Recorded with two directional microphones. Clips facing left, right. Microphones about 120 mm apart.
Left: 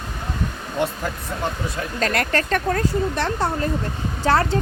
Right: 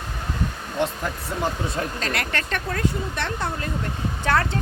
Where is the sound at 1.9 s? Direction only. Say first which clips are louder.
Left 6 dB; 45° left (ahead or behind).